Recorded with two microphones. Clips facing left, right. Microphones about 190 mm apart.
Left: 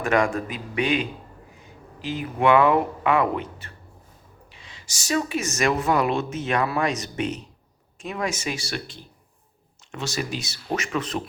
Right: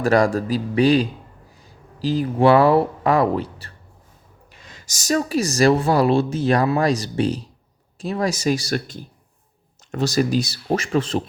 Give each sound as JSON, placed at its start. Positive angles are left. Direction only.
{"t": 0.0, "sound": "speech", "side_deg": -35}